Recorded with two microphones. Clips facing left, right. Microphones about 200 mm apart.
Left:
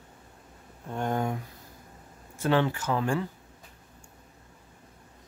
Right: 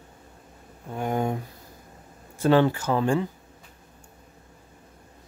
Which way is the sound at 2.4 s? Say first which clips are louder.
Right 6 dB; 35° right (ahead or behind).